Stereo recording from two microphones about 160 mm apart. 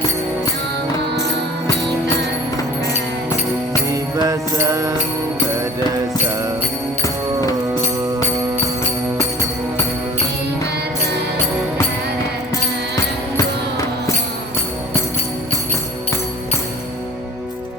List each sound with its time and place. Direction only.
3.9 s music: 20° right (ahead or behind)